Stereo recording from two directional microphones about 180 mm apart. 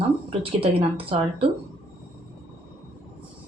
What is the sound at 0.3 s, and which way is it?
Speech, 30° right (ahead or behind).